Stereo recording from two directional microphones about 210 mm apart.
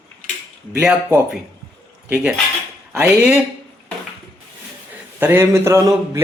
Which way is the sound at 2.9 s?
5° right (ahead or behind).